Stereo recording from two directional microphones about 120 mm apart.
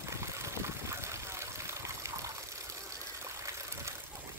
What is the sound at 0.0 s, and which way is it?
Water, 25° right (ahead or behind).